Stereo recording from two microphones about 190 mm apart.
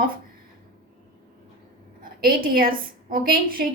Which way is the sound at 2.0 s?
50° right (ahead or behind).